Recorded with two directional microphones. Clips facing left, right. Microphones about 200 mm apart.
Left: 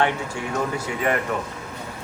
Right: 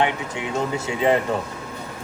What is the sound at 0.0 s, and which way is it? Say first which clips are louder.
Speech: even; 20° right (ahead or behind).